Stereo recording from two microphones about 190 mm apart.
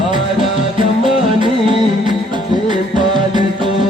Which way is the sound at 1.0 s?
25° right (ahead or behind).